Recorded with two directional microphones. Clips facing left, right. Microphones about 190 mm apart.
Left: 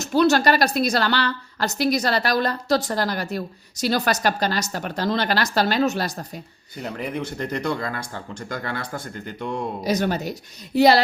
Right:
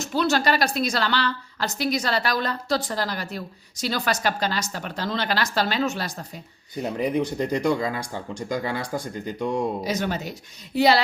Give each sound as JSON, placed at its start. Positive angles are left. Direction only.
{"t": 0.0, "sound": "a woman's voice", "side_deg": 45}
{"t": 6.8, "sound": "speech", "side_deg": -15}
{"t": 9.8, "sound": "speech", "side_deg": 40}